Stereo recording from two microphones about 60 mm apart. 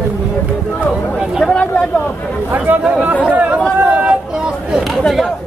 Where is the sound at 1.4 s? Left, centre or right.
Centre.